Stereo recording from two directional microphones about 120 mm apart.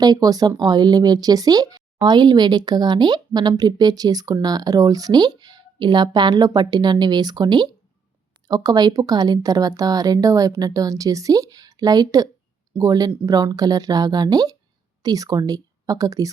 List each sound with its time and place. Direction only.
0.0 s speech: 35° right (ahead or behind)